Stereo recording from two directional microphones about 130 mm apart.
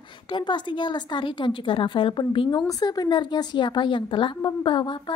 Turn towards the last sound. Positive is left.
turn(degrees=40)  # may be behind; listen again after turning